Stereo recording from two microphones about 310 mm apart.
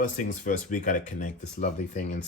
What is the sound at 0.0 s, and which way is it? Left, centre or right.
Speech, left.